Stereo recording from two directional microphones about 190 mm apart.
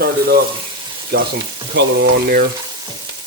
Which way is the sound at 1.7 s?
60° right (ahead or behind).